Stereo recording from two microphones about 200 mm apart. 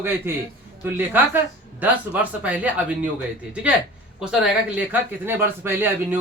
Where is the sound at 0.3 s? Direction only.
10° right (ahead or behind).